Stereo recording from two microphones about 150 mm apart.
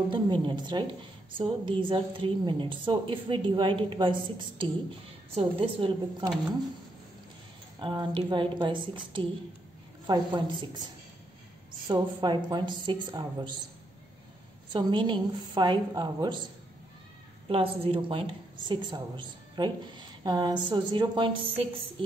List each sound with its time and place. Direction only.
0.1 s a woman's voice: 30° right (ahead or behind)
7.8 s a woman's voice: 30° right (ahead or behind)
11.9 s a woman's voice: 30° right (ahead or behind)
14.7 s a woman's voice: 30° right (ahead or behind)
17.5 s a woman's voice: 40° right (ahead or behind)